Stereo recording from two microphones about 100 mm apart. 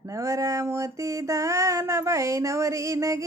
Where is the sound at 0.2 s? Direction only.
30° right (ahead or behind).